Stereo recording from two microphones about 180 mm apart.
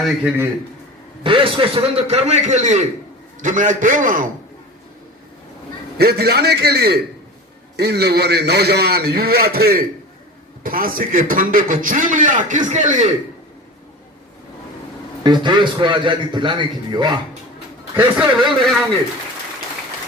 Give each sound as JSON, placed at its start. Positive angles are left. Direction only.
{"t": 1.2, "sound": "a man's voice", "side_deg": -30}
{"t": 6.0, "sound": "a man's voice", "side_deg": -60}
{"t": 15.2, "sound": "a man's voice", "side_deg": -25}
{"t": 17.9, "sound": "a man's voice", "side_deg": -10}